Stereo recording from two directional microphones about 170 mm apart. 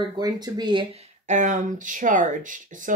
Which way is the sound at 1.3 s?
45° right (ahead or behind).